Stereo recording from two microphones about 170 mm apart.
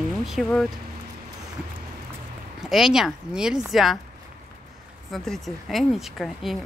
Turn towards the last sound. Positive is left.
turn(degrees=0)  # may be behind; listen again after turning